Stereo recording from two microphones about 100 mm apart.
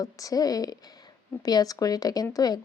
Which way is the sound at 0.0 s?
35° left (ahead or behind).